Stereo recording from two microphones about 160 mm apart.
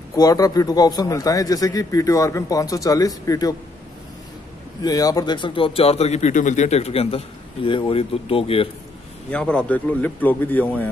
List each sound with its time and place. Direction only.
0.1 s a man's voice: 20° left (ahead or behind)
4.8 s a man's voice: 25° left (ahead or behind)
9.3 s speech: 5° left (ahead or behind)